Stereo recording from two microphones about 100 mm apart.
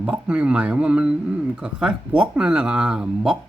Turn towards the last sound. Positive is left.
turn(degrees=-5)  # may be behind; listen again after turning